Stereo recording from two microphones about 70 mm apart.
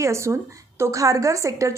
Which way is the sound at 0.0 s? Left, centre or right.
Right.